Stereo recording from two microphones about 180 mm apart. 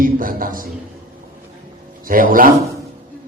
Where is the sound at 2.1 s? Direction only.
50° right (ahead or behind).